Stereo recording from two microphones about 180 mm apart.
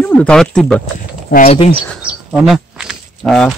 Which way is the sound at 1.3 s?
55° left (ahead or behind).